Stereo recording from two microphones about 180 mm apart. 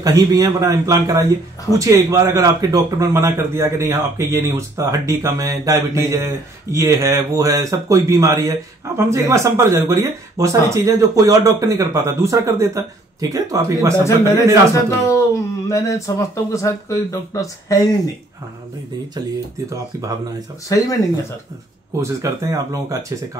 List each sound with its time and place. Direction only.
0.0 s a man's voice: 20° right (ahead or behind)
14.0 s speech: 15° left (ahead or behind)
21.9 s a man's voice: 15° right (ahead or behind)